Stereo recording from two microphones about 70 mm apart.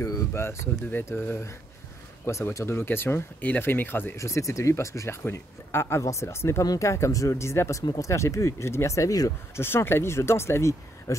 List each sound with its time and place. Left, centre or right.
0.3 s speech: left
4.2 s speech: left
6.6 s speech: left
6.9 s speech: left
9.6 s speech: left